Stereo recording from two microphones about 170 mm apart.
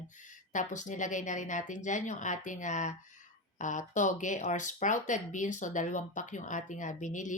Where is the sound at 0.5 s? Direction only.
45° left (ahead or behind).